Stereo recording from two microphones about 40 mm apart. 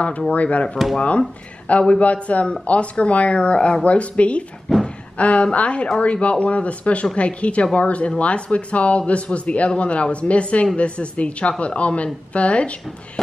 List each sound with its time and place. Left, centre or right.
0.3 s speech: left
4.7 s a sound: centre
5.1 s speech: left